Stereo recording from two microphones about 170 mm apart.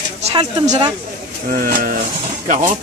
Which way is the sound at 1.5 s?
55° right (ahead or behind).